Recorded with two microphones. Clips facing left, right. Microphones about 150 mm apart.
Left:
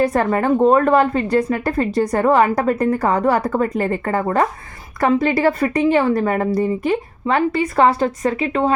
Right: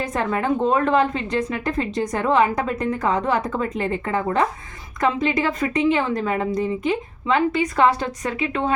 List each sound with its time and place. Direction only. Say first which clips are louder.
0.2 s a woman's voice: left 5 dB; 40° left (ahead or behind)
3.5 s a woman's voice: left 5 dB; 45° left (ahead or behind)
6.1 s a woman's voice: left 4 dB; 50° left (ahead or behind)
6.5 s a woman's voice: left 4 dB; 35° left (ahead or behind)